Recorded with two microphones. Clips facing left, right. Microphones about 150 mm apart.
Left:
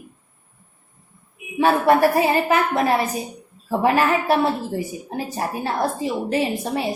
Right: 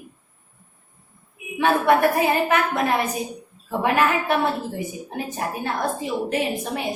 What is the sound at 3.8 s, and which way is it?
Speech, 35° left (ahead or behind).